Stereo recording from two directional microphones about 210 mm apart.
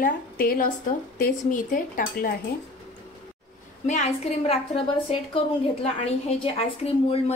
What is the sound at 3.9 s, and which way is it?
A woman's voice, 30° left (ahead or behind).